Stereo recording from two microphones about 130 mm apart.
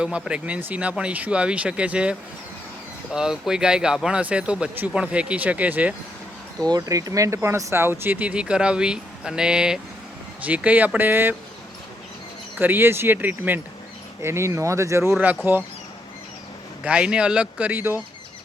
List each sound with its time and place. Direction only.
0.0 s speech: 10° right (ahead or behind)
6.7 s speech: 25° right (ahead or behind)
12.5 s speech: 15° right (ahead or behind)
16.8 s speech: 10° right (ahead or behind)